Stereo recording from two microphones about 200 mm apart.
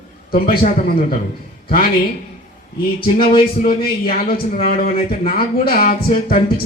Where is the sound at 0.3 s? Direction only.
50° left (ahead or behind).